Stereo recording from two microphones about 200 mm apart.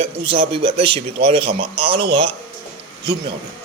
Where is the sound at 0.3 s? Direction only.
25° right (ahead or behind).